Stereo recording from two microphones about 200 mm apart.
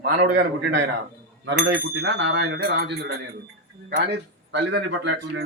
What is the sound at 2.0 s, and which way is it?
Speech, 65° right (ahead or behind).